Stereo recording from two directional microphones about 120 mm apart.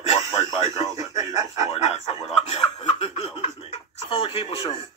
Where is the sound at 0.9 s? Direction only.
30° right (ahead or behind).